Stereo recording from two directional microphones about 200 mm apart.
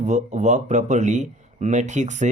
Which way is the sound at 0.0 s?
35° right (ahead or behind).